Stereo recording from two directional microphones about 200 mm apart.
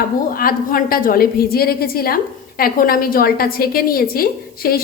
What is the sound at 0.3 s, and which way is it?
A woman's voice, 45° left (ahead or behind).